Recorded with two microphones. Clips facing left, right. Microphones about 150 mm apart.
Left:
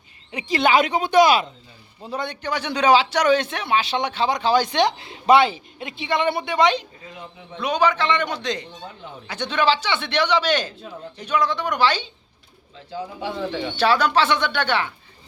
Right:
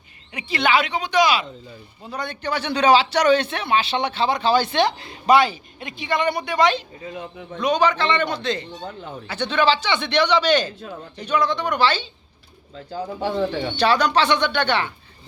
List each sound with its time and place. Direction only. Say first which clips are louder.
0.3 s speech: left 2 dB; 35° left (ahead or behind); by 1.5 s 50° left (ahead or behind)
2.1 s a man's voice: left 2 dB; 20° left (ahead or behind)
2.4 s a man's voice: right 2 dB; 10° left (ahead or behind)
7.6 s a man's voice: right 1 dB; 10° left (ahead or behind)
12.9 s speech: right 4 dB; 45° right (ahead or behind)
13.7 s a man's voice: even; 5° left (ahead or behind)